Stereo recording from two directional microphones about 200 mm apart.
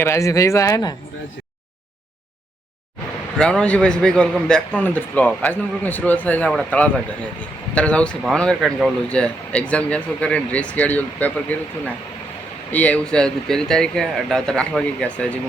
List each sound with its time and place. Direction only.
0.0 s a man's voice: 15° left (ahead or behind)
3.3 s a man's voice: 5° left (ahead or behind)
12.7 s speech: 5° left (ahead or behind)